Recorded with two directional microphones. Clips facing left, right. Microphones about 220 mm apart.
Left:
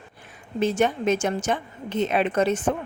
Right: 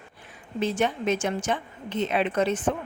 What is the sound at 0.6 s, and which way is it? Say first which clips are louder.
A woman's voice: left 3 dB; 45° left (ahead or behind).